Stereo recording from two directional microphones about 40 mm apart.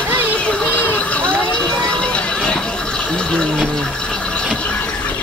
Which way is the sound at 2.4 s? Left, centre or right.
Centre.